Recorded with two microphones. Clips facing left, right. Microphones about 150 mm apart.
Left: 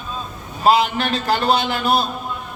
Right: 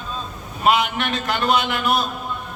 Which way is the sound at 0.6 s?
35° left (ahead or behind).